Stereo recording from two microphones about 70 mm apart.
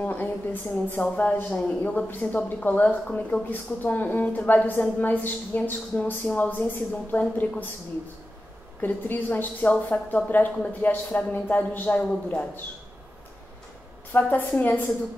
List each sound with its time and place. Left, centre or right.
0.0 s speech: left
8.8 s speech: left
12.1 s speech: centre
14.1 s speech: left